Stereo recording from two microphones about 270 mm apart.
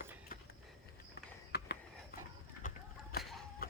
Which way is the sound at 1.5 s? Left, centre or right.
Left.